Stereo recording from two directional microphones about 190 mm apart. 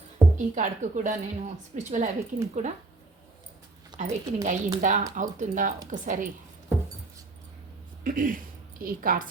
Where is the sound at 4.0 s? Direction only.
40° right (ahead or behind).